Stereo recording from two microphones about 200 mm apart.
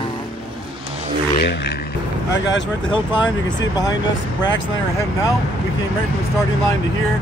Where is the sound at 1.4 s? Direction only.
55° left (ahead or behind).